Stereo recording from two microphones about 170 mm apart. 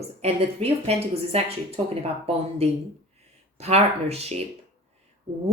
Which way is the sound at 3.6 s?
40° right (ahead or behind).